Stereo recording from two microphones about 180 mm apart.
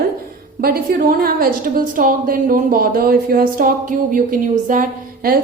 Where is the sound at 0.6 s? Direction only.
55° right (ahead or behind).